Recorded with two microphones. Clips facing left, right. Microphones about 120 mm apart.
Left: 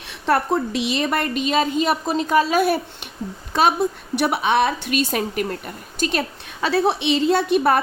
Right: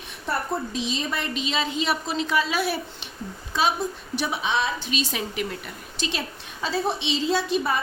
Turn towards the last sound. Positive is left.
turn(degrees=60)  # may be behind; listen again after turning